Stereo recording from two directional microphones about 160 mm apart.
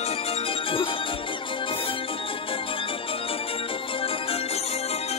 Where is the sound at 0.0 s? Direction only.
40° left (ahead or behind).